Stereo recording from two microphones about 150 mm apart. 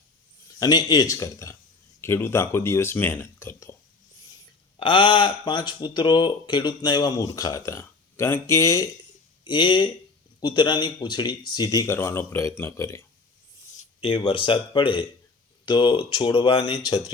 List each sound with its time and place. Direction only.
0.6 s speech: 25° left (ahead or behind)
4.8 s speech: 35° left (ahead or behind)
9.4 s speech: 30° left (ahead or behind)
14.0 s speech: 35° left (ahead or behind)